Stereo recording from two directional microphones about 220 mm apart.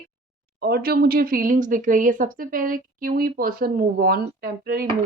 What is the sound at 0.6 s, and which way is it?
Speech, 45° right (ahead or behind).